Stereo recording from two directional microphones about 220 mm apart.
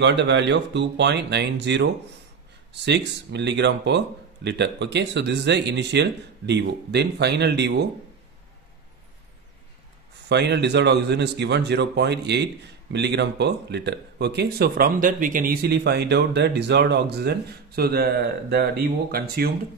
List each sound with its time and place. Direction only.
0.0 s speech: 55° right (ahead or behind)
10.2 s speech: 50° right (ahead or behind)